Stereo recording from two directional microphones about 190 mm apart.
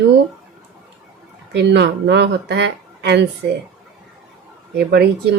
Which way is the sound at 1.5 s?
65° right (ahead or behind).